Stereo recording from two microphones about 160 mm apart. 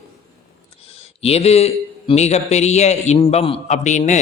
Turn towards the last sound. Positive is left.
turn(degrees=45)  # may be behind; listen again after turning